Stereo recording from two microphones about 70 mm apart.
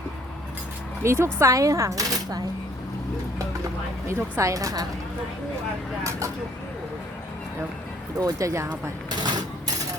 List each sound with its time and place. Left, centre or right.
1.0 s speech: right
4.1 s a woman's voice: right
6.0 s vehicle: right
8.2 s speech: right
9.0 s cash register: right